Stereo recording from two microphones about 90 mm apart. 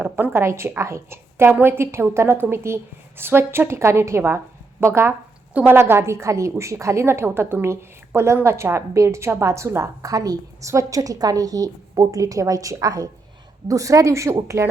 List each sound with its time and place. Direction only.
0.0 s a woman's voice: 20° right (ahead or behind)